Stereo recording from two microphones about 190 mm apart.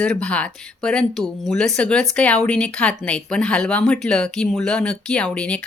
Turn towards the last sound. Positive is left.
turn(degrees=5)  # may be behind; listen again after turning